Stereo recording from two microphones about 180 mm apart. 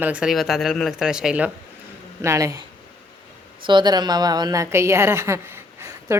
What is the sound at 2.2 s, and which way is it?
A woman's voice, 15° right (ahead or behind).